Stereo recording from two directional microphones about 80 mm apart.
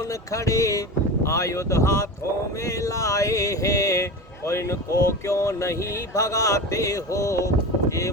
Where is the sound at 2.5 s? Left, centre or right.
Left.